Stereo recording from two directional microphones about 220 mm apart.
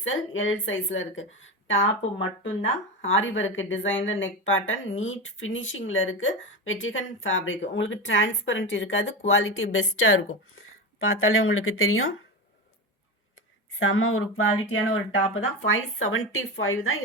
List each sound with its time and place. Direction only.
0.0 s a woman's voice: 60° left (ahead or behind)
13.7 s speech: 65° left (ahead or behind)